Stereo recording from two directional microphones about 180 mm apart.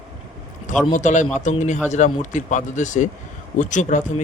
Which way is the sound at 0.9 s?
45° left (ahead or behind).